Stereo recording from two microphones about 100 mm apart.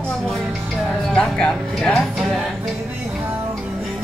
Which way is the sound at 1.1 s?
10° left (ahead or behind).